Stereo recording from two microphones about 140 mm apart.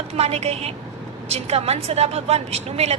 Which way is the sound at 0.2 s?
50° right (ahead or behind).